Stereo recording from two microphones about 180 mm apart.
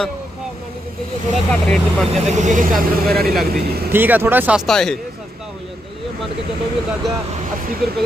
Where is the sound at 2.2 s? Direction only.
40° right (ahead or behind).